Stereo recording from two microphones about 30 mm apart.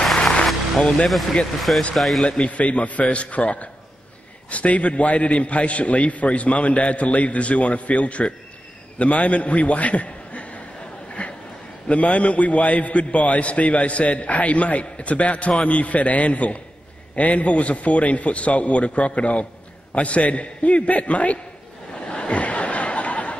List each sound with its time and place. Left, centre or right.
0.0 s music: centre
0.7 s speech: left
2.0 s speech: centre
2.2 s speech: left
2.5 s a man's voice: left
11.2 s a sound: left
11.9 s a man's voice: left
22.0 s a sound: left